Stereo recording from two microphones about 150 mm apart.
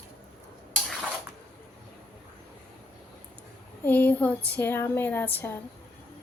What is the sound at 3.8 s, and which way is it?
Speech, 10° left (ahead or behind).